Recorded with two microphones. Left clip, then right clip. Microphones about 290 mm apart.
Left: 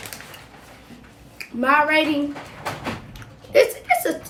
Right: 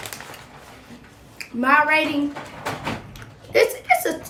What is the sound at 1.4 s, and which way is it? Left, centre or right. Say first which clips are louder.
Speech: right 1 dB; centre.